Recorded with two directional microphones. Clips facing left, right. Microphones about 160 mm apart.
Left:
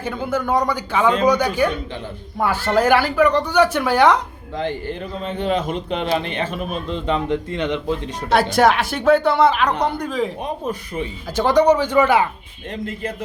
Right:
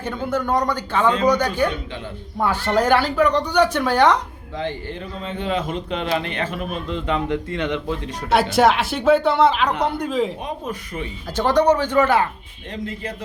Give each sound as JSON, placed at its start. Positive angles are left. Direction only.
{"t": 0.0, "sound": "speech", "side_deg": 5}
{"t": 4.5, "sound": "a man's voice", "side_deg": 45}
{"t": 6.1, "sound": "speech", "side_deg": 25}
{"t": 8.3, "sound": "speech", "side_deg": 0}
{"t": 10.7, "sound": "a man's voice", "side_deg": 30}
{"t": 11.3, "sound": "speech", "side_deg": 10}
{"t": 12.8, "sound": "speech", "side_deg": 50}